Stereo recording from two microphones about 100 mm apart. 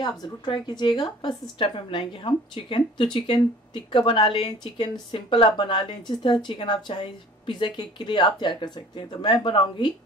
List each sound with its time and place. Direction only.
0.5 s a woman's voice: 50° left (ahead or behind)